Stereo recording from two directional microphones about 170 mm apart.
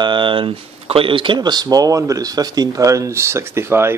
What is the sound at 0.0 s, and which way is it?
Speech, 30° right (ahead or behind).